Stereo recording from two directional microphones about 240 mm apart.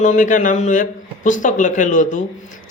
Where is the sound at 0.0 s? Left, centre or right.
Left.